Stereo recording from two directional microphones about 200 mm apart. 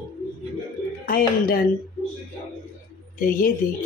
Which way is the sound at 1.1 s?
45° left (ahead or behind).